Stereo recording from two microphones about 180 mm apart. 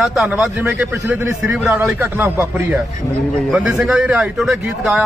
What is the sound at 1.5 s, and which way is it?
Speech, 5° right (ahead or behind).